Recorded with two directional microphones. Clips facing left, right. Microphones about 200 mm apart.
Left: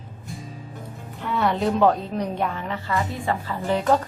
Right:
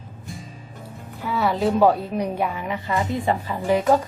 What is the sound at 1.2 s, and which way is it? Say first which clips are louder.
Speech: right 1 dB; 5° right (ahead or behind).